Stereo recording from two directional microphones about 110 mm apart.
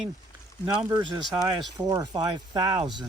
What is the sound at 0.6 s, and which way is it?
Speech, 10° right (ahead or behind).